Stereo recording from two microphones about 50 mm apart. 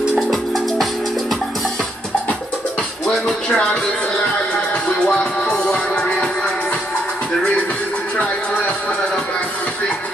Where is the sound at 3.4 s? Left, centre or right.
Centre.